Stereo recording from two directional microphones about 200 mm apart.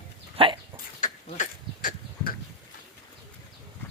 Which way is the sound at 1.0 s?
40° left (ahead or behind).